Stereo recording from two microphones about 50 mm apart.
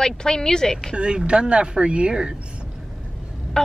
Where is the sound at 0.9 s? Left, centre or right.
Right.